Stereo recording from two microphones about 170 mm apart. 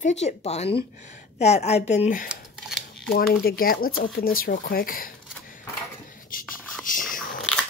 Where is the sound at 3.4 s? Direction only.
60° left (ahead or behind).